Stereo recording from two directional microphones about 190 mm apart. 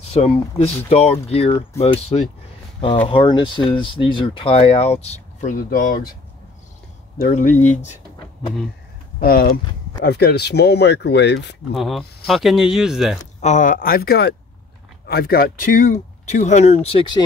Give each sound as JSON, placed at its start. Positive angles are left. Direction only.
{"t": 0.0, "sound": "speech", "side_deg": 35}
{"t": 7.6, "sound": "speech", "side_deg": 40}
{"t": 9.2, "sound": "speech", "side_deg": 50}
{"t": 11.7, "sound": "speech", "side_deg": 0}
{"t": 13.4, "sound": "speech", "side_deg": 40}